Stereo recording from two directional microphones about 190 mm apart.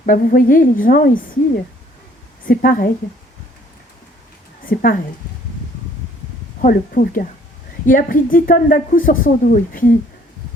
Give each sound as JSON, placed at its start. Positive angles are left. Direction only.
{"t": 0.0, "sound": "a woman's voice", "side_deg": 45}
{"t": 2.5, "sound": "a woman's voice", "side_deg": 45}
{"t": 4.6, "sound": "a woman's voice", "side_deg": 50}
{"t": 6.6, "sound": "a woman's voice", "side_deg": 45}